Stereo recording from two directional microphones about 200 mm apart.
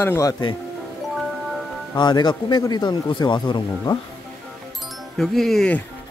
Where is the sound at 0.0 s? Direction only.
15° left (ahead or behind).